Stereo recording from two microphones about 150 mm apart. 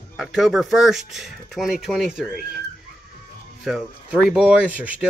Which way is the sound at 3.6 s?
5° right (ahead or behind).